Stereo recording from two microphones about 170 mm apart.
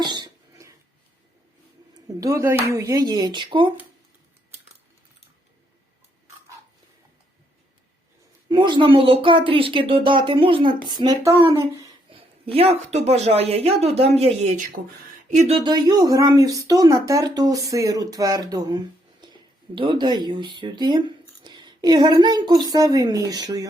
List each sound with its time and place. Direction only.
0.0 s cough: 25° right (ahead or behind)
2.0 s speech: 20° right (ahead or behind)
8.4 s speech: 25° right (ahead or behind)